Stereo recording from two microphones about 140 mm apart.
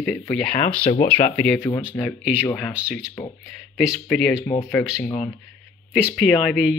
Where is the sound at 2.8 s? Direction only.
10° right (ahead or behind).